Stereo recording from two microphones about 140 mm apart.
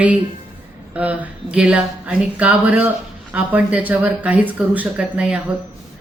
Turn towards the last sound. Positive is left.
turn(degrees=-10)  # may be behind; listen again after turning